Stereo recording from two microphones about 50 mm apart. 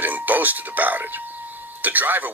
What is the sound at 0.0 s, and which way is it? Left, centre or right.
Speech, right.